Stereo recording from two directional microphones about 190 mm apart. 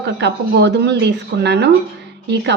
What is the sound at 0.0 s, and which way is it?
Speech, 65° right (ahead or behind).